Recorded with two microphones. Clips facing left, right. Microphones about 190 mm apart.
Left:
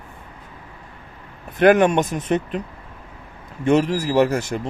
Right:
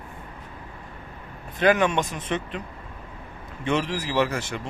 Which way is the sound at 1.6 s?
50° left (ahead or behind).